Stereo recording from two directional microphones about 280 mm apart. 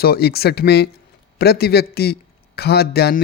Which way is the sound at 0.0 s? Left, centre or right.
Left.